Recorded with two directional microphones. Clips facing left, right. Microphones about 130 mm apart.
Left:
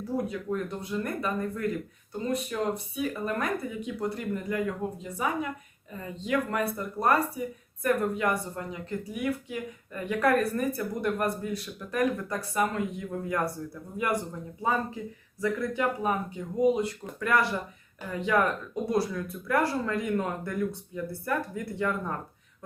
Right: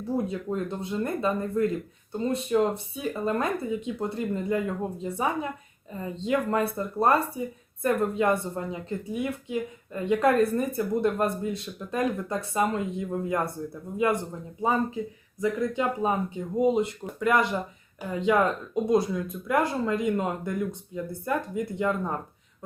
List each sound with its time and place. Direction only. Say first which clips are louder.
0.0 s speech: right 2 dB; 25° right (ahead or behind)